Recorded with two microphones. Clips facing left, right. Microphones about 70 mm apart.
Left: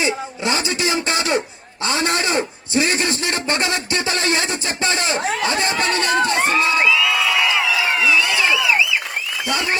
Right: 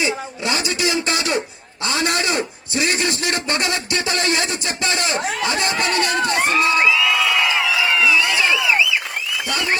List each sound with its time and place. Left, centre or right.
0.0 s a man's voice: left
6.8 s crowd: centre
7.9 s a sound: left